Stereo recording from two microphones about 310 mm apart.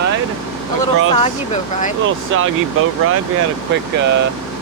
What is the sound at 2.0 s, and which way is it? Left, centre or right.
Speech, right.